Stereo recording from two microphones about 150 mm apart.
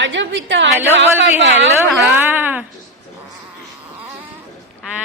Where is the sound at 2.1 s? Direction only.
10° right (ahead or behind).